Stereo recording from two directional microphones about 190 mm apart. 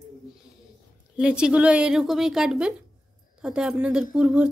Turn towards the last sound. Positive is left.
turn(degrees=-5)  # may be behind; listen again after turning